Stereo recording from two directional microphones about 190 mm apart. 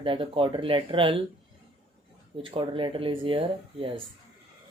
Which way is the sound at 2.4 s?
25° right (ahead or behind).